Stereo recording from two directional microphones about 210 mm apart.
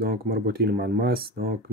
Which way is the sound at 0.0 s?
45° right (ahead or behind).